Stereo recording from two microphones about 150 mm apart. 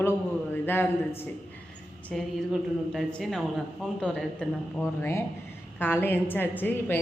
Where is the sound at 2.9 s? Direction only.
Centre (ahead or behind).